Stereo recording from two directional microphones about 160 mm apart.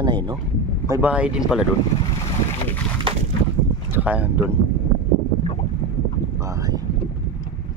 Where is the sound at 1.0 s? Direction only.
5° right (ahead or behind).